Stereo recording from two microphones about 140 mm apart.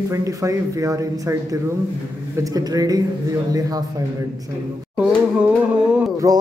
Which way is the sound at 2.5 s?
25° right (ahead or behind).